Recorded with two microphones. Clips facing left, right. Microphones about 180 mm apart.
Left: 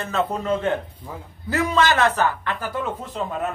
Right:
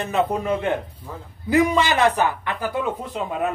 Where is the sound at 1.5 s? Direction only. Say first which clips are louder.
Right 2 dB; 15° right (ahead or behind).